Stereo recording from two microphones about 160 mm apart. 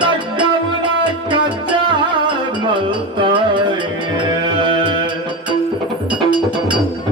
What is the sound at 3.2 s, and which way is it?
Music, 30° right (ahead or behind).